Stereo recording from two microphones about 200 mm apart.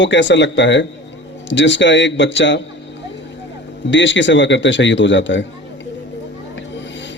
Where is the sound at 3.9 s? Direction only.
65° left (ahead or behind).